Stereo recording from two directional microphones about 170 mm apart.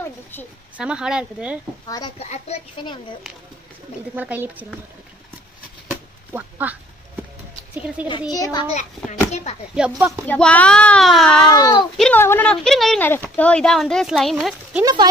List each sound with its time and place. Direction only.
0.0 s speech: 10° left (ahead or behind)
0.7 s speech: 5° right (ahead or behind)
1.9 s a child's voice: 20° left (ahead or behind)
2.1 s a child's voice: 40° left (ahead or behind)
4.1 s speech: 10° right (ahead or behind)
5.9 s a sound: 10° right (ahead or behind)
8.3 s a child's voice: 20° left (ahead or behind)
9.3 s a child's voice: 40° left (ahead or behind)
9.8 s speech: 5° right (ahead or behind)
10.2 s speech: 10° left (ahead or behind)
11.5 s a child's voice: 25° left (ahead or behind)
12.0 s speech: 10° left (ahead or behind)